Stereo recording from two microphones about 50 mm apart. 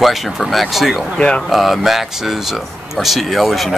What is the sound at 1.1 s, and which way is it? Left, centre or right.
Speech, centre.